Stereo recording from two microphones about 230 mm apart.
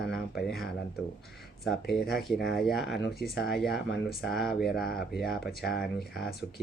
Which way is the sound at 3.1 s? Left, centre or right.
Left.